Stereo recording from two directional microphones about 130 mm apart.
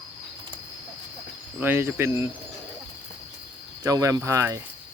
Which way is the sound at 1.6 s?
15° right (ahead or behind).